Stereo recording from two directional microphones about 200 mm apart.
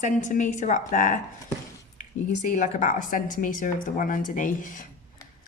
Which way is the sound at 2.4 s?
40° left (ahead or behind).